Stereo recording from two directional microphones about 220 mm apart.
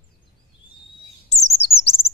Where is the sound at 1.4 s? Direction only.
30° left (ahead or behind).